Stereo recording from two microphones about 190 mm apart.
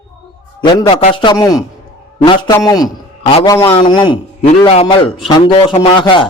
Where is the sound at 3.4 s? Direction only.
15° left (ahead or behind).